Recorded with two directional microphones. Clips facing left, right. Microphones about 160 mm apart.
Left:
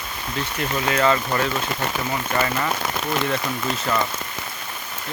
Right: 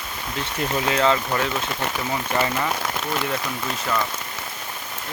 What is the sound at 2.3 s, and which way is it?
Speech, 10° right (ahead or behind).